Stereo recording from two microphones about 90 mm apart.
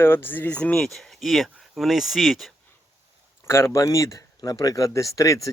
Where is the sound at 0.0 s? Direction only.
25° left (ahead or behind); by 2.5 s centre (ahead or behind).